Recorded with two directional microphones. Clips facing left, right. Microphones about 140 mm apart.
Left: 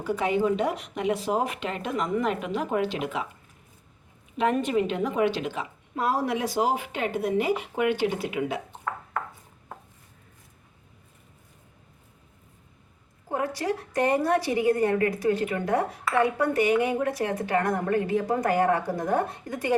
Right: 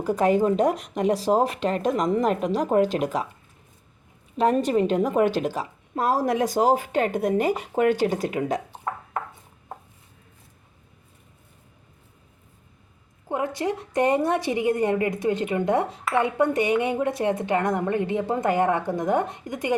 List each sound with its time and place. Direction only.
0.0 s a woman's voice: 45° right (ahead or behind)
4.4 s a woman's voice: 35° right (ahead or behind)
13.2 s a woman's voice: 20° right (ahead or behind)